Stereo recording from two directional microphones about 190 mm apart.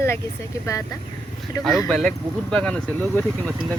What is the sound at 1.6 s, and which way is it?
Speech, centre (ahead or behind).